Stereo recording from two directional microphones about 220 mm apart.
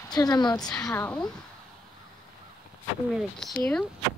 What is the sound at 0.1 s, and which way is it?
Speech, 20° left (ahead or behind).